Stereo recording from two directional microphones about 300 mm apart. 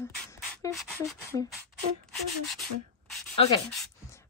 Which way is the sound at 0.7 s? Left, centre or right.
Centre.